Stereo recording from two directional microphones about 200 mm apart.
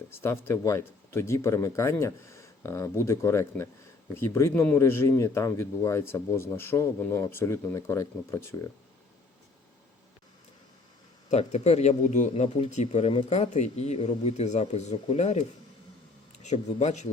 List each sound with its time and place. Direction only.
0.1 s speech: 10° left (ahead or behind)
11.3 s speech: 35° left (ahead or behind)